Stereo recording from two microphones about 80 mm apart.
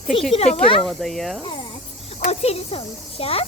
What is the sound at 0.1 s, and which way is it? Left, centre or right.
Speech, centre.